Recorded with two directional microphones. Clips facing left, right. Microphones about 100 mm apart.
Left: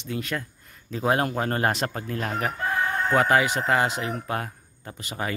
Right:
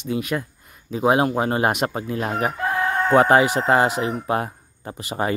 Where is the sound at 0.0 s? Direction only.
15° right (ahead or behind).